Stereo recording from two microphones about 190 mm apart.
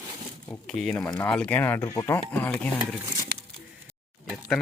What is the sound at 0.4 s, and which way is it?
Speech, 5° left (ahead or behind).